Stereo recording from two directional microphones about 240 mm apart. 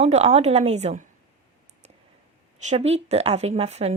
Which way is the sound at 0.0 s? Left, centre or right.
Right.